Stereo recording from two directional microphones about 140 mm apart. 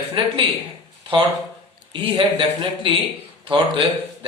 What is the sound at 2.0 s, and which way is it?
Speech, 35° right (ahead or behind).